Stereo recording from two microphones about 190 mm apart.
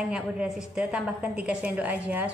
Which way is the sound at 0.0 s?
Centre (ahead or behind).